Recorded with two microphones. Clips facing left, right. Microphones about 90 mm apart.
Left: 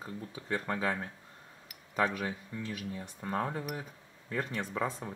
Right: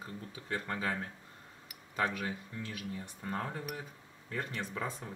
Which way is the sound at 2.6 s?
20° left (ahead or behind).